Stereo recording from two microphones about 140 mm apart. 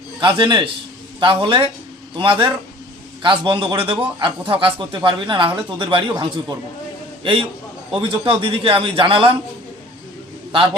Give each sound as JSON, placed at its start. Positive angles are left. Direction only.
{"t": 0.2, "sound": "a man's voice", "side_deg": -35}